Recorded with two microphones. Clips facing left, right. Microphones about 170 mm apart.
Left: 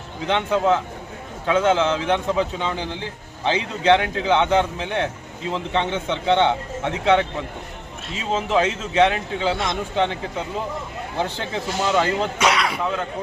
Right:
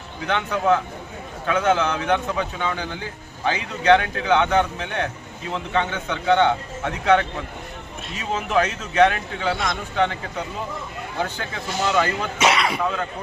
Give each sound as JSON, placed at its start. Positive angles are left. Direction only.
{"t": 0.3, "sound": "speech", "side_deg": 25}
{"t": 11.2, "sound": "speech", "side_deg": 25}
{"t": 12.4, "sound": "speech", "side_deg": -5}